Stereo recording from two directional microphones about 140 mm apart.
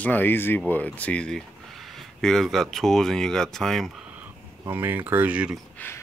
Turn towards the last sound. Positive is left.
turn(degrees=10)  # may be behind; listen again after turning